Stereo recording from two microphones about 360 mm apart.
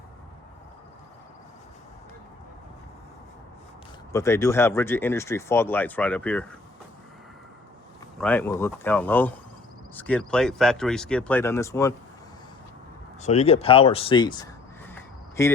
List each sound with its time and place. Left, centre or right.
4.1 s speech: centre
8.2 s speech: centre
13.2 s speech: centre
14.8 s a sound: centre